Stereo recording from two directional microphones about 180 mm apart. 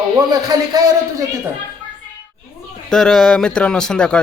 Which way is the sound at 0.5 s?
25° right (ahead or behind).